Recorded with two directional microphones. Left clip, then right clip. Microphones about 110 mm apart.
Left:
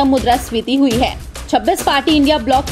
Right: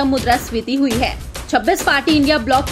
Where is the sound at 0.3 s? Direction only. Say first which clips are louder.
Left 2 dB; 15° left (ahead or behind).